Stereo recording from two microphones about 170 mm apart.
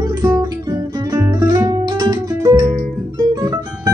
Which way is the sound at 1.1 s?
20° right (ahead or behind).